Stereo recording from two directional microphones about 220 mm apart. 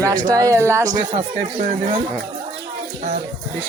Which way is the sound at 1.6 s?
40° right (ahead or behind).